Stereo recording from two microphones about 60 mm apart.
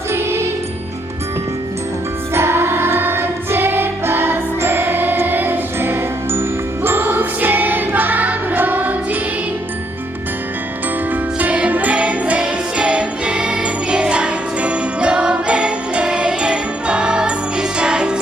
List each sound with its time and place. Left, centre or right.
0.1 s music: right
2.3 s choir: right
6.8 s music: right
11.1 s music: right